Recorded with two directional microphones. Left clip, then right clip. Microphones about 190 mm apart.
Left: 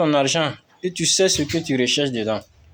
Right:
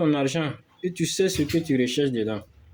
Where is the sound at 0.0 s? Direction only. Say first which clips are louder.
Left 6 dB; 15° right (ahead or behind).